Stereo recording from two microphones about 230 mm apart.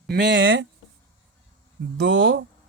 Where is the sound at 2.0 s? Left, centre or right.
Right.